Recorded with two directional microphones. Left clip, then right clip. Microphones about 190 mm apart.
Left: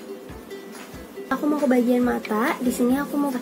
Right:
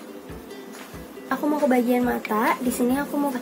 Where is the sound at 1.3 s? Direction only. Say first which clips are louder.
Even; 10° left (ahead or behind).